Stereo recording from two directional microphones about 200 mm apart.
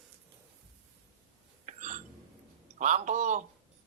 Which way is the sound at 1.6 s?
35° right (ahead or behind).